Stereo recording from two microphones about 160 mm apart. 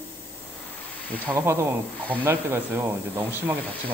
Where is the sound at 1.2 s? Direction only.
15° right (ahead or behind).